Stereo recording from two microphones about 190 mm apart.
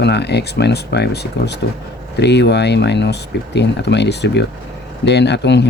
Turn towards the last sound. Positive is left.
turn(degrees=65)  # may be behind; listen again after turning